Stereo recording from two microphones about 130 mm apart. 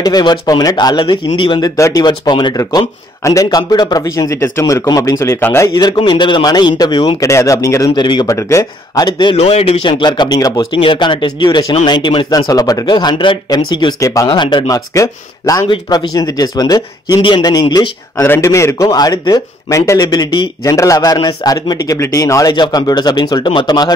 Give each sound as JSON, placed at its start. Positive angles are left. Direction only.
{"t": 0.0, "sound": "speech", "side_deg": 30}
{"t": 1.8, "sound": "a man's voice", "side_deg": 25}
{"t": 2.0, "sound": "a man's voice", "side_deg": 35}
{"t": 5.8, "sound": "speech", "side_deg": 35}
{"t": 7.2, "sound": "a man's voice", "side_deg": 25}
{"t": 8.4, "sound": "a man's voice", "side_deg": 25}
{"t": 9.4, "sound": "a man's voice", "side_deg": 55}
{"t": 9.8, "sound": "a man's voice", "side_deg": 35}
{"t": 15.7, "sound": "speech", "side_deg": 40}
{"t": 18.2, "sound": "a man's voice", "side_deg": 20}